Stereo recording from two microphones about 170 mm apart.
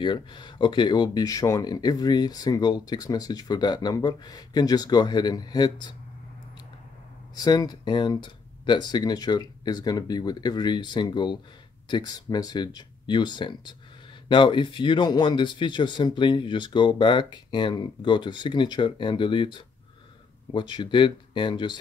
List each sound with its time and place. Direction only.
0.0 s speech: 30° left (ahead or behind)
7.3 s speech: 20° left (ahead or behind)